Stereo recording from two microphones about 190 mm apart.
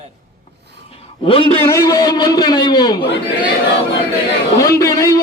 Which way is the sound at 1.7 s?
15° left (ahead or behind).